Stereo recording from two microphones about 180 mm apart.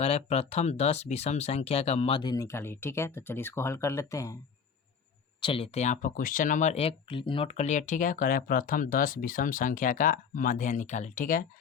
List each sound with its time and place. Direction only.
0.0 s speech: 35° left (ahead or behind); by 4.4 s 15° left (ahead or behind)
5.4 s speech: 30° left (ahead or behind); by 11.4 s 50° left (ahead or behind)